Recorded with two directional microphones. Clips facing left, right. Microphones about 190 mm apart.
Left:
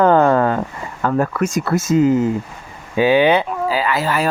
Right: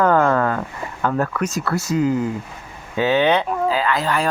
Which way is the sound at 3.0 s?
10° left (ahead or behind).